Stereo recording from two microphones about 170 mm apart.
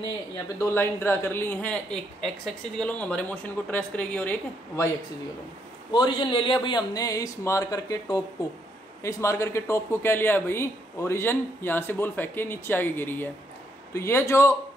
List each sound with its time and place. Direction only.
0.6 s a man's voice: 15° left (ahead or behind)
5.9 s a man's voice: 30° left (ahead or behind)